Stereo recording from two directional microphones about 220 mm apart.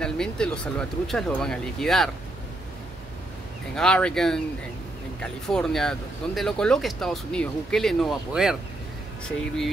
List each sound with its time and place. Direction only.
0.0 s speech: 5° left (ahead or behind)
3.7 s speech: 5° left (ahead or behind)